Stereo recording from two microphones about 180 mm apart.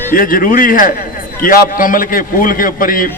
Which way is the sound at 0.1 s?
50° left (ahead or behind).